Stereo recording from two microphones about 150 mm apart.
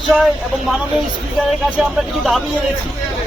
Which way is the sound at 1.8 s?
Centre (ahead or behind).